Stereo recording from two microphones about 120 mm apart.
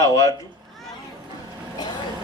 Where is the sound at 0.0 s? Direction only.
30° left (ahead or behind).